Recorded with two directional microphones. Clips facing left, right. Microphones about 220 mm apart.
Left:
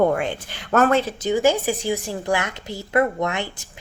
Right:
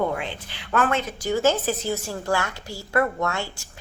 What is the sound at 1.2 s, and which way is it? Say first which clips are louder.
A woman's voice: left 1 dB; 15° left (ahead or behind).